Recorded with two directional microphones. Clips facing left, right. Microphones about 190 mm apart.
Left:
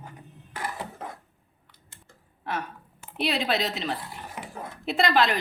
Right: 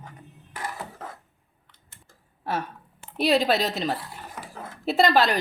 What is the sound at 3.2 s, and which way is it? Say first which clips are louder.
Speech: right 5 dB; 40° right (ahead or behind).